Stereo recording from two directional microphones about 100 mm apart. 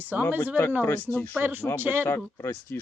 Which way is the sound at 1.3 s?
20° right (ahead or behind).